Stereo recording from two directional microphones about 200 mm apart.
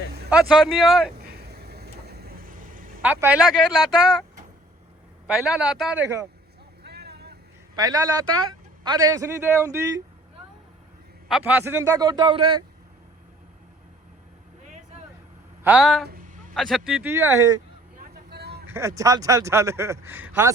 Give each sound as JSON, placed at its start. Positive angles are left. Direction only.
{"t": 0.3, "sound": "speech", "side_deg": -5}
{"t": 1.2, "sound": "a sound", "side_deg": -50}
{"t": 3.0, "sound": "speech", "side_deg": -10}
{"t": 5.3, "sound": "speech", "side_deg": -5}
{"t": 6.8, "sound": "vehicle", "side_deg": -55}
{"t": 7.8, "sound": "speech", "side_deg": -20}
{"t": 11.3, "sound": "a man's voice", "side_deg": -5}
{"t": 15.6, "sound": "speech", "side_deg": -5}
{"t": 16.0, "sound": "a sound", "side_deg": -45}
{"t": 16.6, "sound": "speech", "side_deg": 0}
{"t": 17.9, "sound": "vehicle", "side_deg": -50}
{"t": 18.7, "sound": "speech", "side_deg": -15}